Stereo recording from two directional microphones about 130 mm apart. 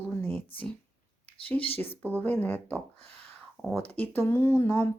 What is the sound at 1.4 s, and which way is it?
Speech, 45° left (ahead or behind).